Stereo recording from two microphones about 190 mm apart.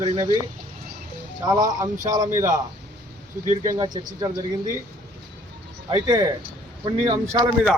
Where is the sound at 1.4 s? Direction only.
20° right (ahead or behind).